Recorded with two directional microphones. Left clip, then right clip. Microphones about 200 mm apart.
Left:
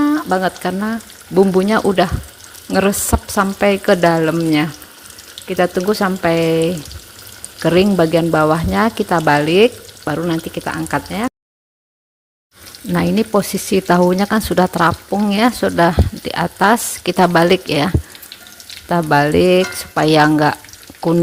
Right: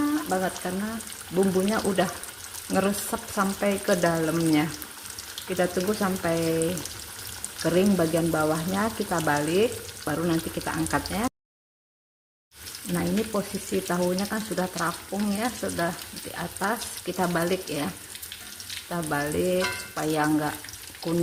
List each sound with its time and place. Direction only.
0.0 s frying: 50° left (ahead or behind)
1.5 s speech: 45° left (ahead or behind)
12.9 s speech: 50° left (ahead or behind)